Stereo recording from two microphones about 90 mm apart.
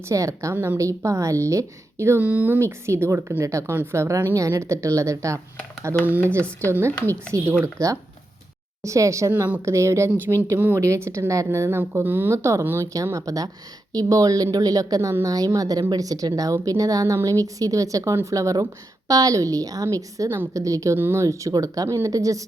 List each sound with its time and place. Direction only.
0.1 s speech: 35° right (ahead or behind)
0.5 s speech: 20° right (ahead or behind)
0.8 s speech: 35° right (ahead or behind)
2.2 s speech: 15° right (ahead or behind)
2.6 s speech: 30° right (ahead or behind)
6.1 s speech: 20° right (ahead or behind)
6.7 s speech: 30° right (ahead or behind)
9.3 s speech: 20° right (ahead or behind)
9.6 s a woman's voice: 35° right (ahead or behind)